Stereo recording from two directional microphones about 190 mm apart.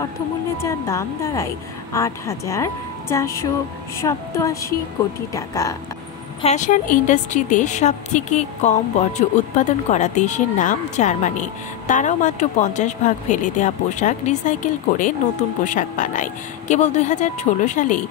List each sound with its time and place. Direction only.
0.6 s a woman's voice: 15° left (ahead or behind)
6.4 s a woman's voice: 40° left (ahead or behind)